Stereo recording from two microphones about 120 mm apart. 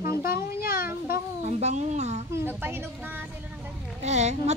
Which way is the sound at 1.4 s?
70° right (ahead or behind).